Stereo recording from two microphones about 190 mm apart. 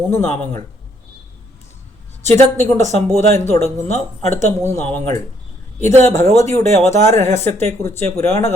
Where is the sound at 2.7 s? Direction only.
35° right (ahead or behind).